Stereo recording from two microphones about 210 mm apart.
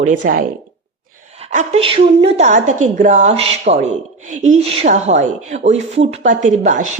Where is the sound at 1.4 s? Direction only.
30° right (ahead or behind).